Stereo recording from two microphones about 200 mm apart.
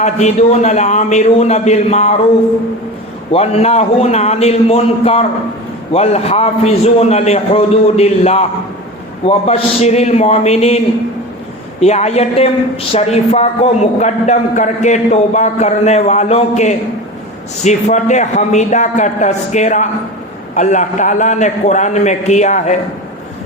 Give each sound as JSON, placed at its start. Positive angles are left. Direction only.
{"t": 0.0, "sound": "a woman's voice", "side_deg": 35}
{"t": 3.3, "sound": "a woman's voice", "side_deg": 30}
{"t": 11.8, "sound": "a woman's voice", "side_deg": 35}